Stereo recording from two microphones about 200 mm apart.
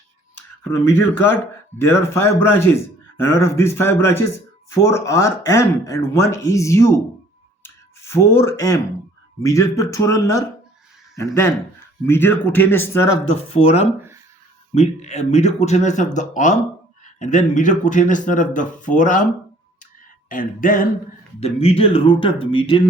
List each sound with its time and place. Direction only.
1.8 s a man's voice: 10° left (ahead or behind)
13.2 s speech: 30° left (ahead or behind)
20.3 s a sound: 45° left (ahead or behind)
21.4 s speech: 30° left (ahead or behind)